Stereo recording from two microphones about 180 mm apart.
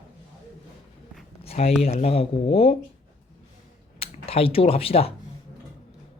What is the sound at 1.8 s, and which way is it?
Speech, 35° left (ahead or behind).